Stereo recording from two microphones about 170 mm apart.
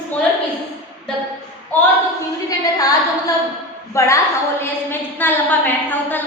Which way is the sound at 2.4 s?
20° left (ahead or behind).